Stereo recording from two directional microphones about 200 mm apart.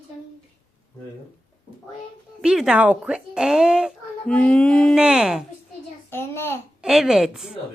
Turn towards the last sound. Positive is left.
turn(degrees=0)  # may be behind; listen again after turning